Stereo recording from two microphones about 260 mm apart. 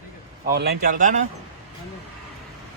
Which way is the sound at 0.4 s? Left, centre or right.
Right.